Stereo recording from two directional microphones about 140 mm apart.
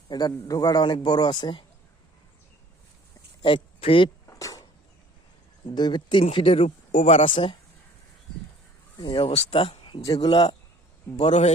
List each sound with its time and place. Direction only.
0.1 s a man's voice: 30° left (ahead or behind)
3.4 s speech: 40° left (ahead or behind)
4.3 s a sound: 25° left (ahead or behind)
5.6 s a man's voice: 30° left (ahead or behind)
6.7 s speech: 65° left (ahead or behind)
7.3 s a man's voice: 35° left (ahead or behind)
9.0 s a man's voice: 40° left (ahead or behind)
11.2 s speech: 50° left (ahead or behind)